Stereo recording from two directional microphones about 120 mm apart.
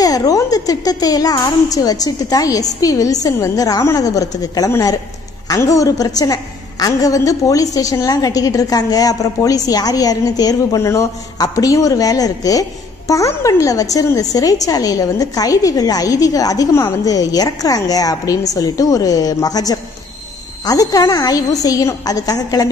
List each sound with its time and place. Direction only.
0.0 s a woman's voice: 30° left (ahead or behind)